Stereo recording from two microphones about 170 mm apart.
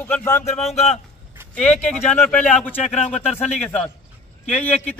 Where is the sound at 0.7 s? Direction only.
40° left (ahead or behind).